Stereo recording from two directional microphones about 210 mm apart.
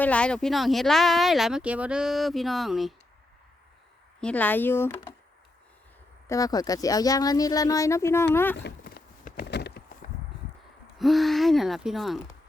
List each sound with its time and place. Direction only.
0.0 s speech: 5° left (ahead or behind)
4.2 s speech: 5° left (ahead or behind)
6.2 s speech: 15° left (ahead or behind)
8.6 s a sound: 45° left (ahead or behind)
10.9 s speech: centre (ahead or behind)